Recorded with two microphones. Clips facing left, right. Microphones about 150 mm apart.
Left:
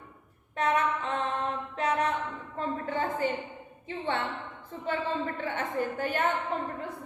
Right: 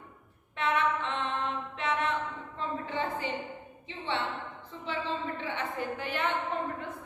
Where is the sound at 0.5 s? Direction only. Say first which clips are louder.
Left 2 dB; 40° left (ahead or behind).